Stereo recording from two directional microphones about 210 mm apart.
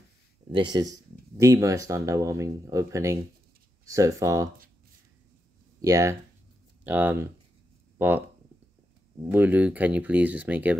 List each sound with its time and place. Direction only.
0.5 s speech: 20° right (ahead or behind)
5.8 s speech: 15° right (ahead or behind)
9.2 s speech: 10° right (ahead or behind)